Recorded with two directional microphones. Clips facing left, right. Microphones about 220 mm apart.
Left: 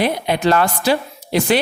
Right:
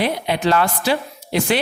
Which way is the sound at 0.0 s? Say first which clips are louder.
Left 2 dB; 45° left (ahead or behind).